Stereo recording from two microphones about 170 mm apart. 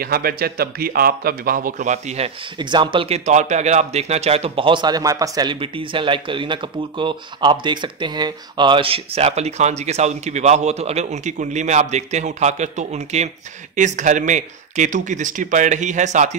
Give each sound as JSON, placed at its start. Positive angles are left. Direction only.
{"t": 0.0, "sound": "a man's voice", "side_deg": -60}
{"t": 2.6, "sound": "speech", "side_deg": -25}
{"t": 3.3, "sound": "a man's voice", "side_deg": -45}